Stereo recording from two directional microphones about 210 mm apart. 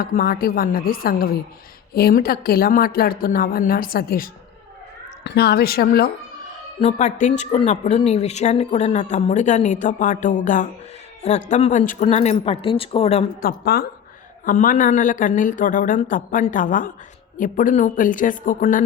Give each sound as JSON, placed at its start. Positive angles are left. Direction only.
{"t": 0.0, "sound": "a woman's voice", "side_deg": 45}
{"t": 6.8, "sound": "speech", "side_deg": 35}
{"t": 13.4, "sound": "a woman's voice", "side_deg": 45}